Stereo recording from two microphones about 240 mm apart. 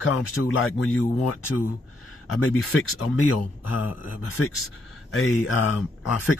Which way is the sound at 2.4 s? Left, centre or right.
Left.